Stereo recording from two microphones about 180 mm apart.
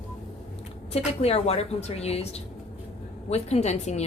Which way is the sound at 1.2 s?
35° left (ahead or behind).